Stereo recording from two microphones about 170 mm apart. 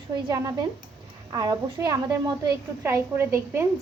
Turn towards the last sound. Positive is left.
turn(degrees=-15)  # may be behind; listen again after turning